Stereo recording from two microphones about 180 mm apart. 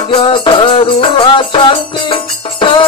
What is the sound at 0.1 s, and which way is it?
Music, 30° left (ahead or behind).